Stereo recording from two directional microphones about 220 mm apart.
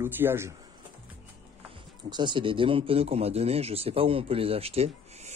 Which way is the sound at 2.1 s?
20° right (ahead or behind).